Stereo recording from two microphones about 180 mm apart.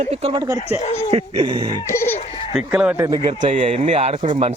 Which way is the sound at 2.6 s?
5° right (ahead or behind).